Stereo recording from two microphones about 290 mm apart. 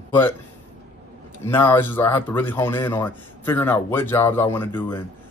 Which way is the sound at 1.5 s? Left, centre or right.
Centre.